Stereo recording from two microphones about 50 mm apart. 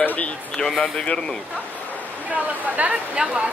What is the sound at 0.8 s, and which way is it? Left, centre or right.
Speech, centre.